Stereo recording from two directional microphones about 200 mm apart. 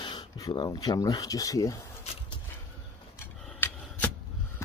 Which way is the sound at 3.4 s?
10° left (ahead or behind).